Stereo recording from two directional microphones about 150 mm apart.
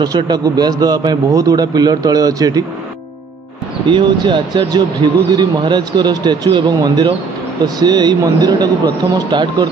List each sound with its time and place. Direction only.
0.0 s speech: 25° right (ahead or behind)
3.9 s speech: 30° right (ahead or behind)